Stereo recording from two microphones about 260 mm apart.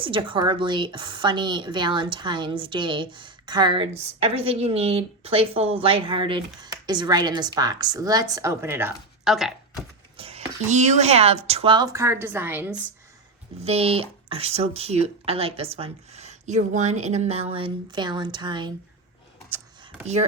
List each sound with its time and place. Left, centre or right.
0.0 s speech: centre
10.2 s speech: right
13.6 s speech: right